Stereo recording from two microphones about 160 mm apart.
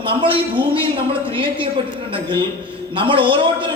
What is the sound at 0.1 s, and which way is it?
Speech, 30° right (ahead or behind).